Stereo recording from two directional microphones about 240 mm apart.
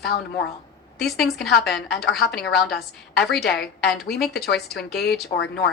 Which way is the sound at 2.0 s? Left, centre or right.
Left.